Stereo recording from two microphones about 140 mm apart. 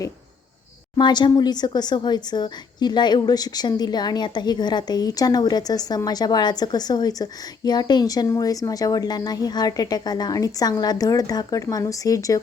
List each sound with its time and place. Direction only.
0.9 s a woman's voice: 30° left (ahead or behind)